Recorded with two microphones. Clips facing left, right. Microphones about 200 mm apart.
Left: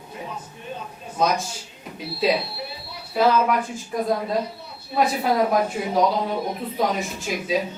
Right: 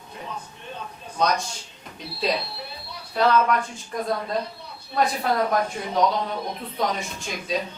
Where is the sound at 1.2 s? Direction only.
5° left (ahead or behind).